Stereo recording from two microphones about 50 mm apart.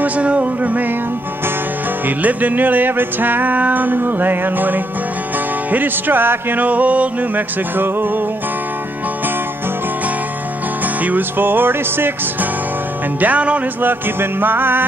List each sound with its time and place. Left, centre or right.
0.0 s music: right
2.0 s music: right
11.1 s music: right
13.2 s music: right
14.4 s music: right